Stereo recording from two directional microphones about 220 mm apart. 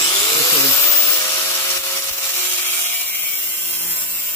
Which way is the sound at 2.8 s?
10° left (ahead or behind).